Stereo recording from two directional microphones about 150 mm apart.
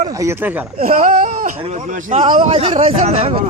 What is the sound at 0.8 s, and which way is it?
Speech, 65° right (ahead or behind).